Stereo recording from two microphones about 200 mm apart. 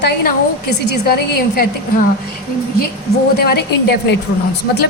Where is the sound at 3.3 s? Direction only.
55° left (ahead or behind).